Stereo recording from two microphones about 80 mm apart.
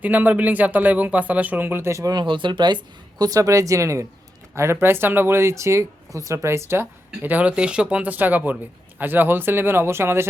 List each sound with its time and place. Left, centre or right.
0.0 s speech: right
2.1 s speech: right
3.2 s speech: right